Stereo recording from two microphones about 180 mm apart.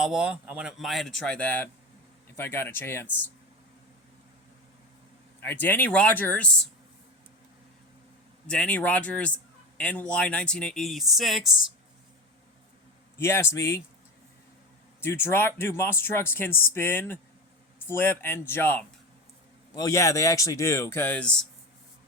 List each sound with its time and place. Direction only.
0.0 s speech: 5° right (ahead or behind); by 3.1 s 10° left (ahead or behind)
5.4 s speech: 10° left (ahead or behind)
8.4 s speech: 5° left (ahead or behind)
13.1 s speech: 15° left (ahead or behind)
15.0 s speech: 10° left (ahead or behind)